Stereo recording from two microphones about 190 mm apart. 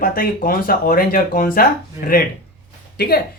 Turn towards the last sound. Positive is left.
turn(degrees=55)  # may be behind; listen again after turning